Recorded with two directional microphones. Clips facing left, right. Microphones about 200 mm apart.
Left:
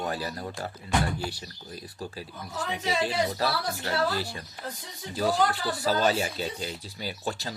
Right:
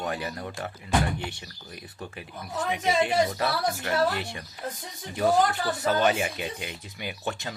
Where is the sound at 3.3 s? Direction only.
30° left (ahead or behind).